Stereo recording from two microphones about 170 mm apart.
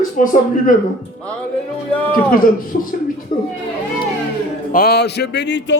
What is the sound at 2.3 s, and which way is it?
Speech, 55° left (ahead or behind).